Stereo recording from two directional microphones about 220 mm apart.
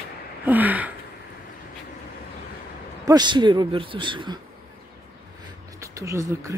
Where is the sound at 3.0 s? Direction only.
20° right (ahead or behind).